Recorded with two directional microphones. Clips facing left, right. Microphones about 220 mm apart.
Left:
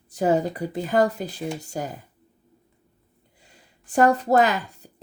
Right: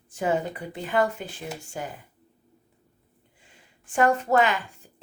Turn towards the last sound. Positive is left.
turn(degrees=40)  # may be behind; listen again after turning